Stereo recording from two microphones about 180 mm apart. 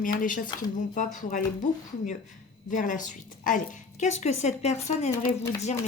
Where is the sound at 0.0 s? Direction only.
50° left (ahead or behind).